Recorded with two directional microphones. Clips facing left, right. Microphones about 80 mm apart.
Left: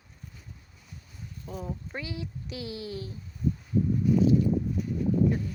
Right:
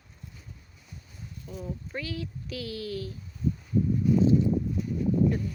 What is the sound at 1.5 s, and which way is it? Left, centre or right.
Speech, left.